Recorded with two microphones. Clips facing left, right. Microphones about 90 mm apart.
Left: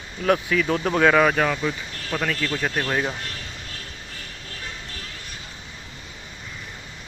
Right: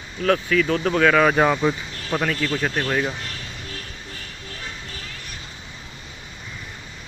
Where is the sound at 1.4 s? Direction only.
20° right (ahead or behind).